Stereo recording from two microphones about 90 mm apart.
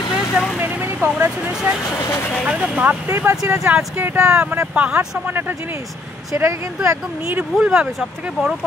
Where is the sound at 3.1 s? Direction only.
30° right (ahead or behind).